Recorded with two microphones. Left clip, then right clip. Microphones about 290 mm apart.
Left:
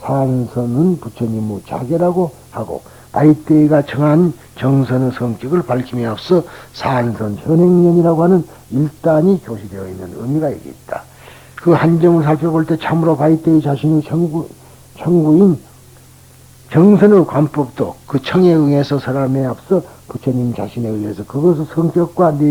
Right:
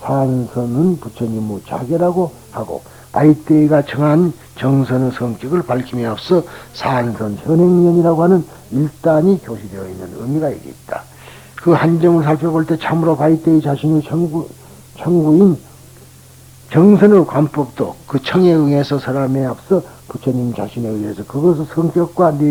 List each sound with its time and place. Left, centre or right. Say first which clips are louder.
0.0 s speech: even; right; by 4.3 s centre
4.5 s speech: even; centre
7.3 s speech: even; right
9.7 s speech: even; right
11.5 s speech: even; centre
12.9 s speech: left 1 dB; centre
13.3 s a man's voice: even; right
14.9 s speech: even; right
16.6 s speech: even; centre
19.3 s speech: even; right
20.1 s speech: even; right
21.0 s speech: even; right